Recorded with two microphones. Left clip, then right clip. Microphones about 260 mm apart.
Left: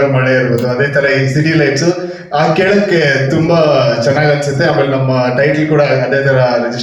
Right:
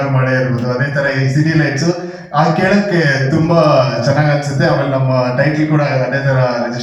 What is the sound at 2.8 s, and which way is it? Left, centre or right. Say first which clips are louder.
A man's voice: left 3 dB; left.